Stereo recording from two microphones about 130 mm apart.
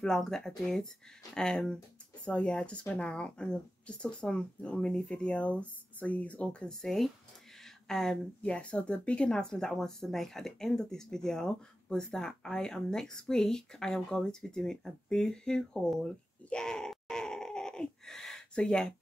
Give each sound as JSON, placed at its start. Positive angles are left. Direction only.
{"t": 0.0, "sound": "a woman's voice", "side_deg": 5}